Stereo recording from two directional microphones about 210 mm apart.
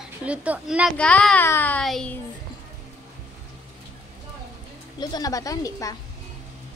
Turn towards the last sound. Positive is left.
turn(degrees=15)  # may be behind; listen again after turning